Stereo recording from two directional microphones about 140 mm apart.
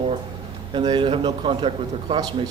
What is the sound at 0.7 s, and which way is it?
A man's voice, 35° right (ahead or behind).